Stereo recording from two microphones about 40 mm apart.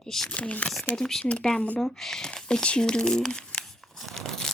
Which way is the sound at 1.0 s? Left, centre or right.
Centre.